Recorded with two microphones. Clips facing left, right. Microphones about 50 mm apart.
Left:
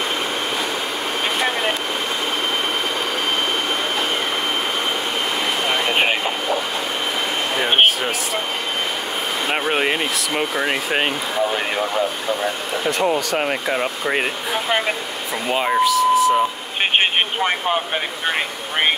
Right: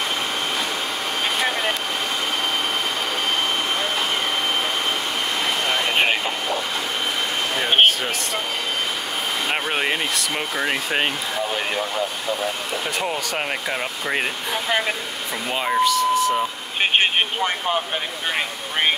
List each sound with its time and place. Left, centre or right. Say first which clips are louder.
1.4 s vehicle: left 2 dB; centre
5.7 s vehicle: left 1 dB; centre
7.5 s a sound: left 1 dB; centre
9.5 s speech: left 4 dB; centre
16.9 s vehicle: left 2 dB; centre
17.5 s speech: left 3 dB; centre